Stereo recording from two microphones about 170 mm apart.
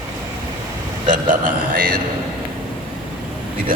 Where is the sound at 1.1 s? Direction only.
50° right (ahead or behind).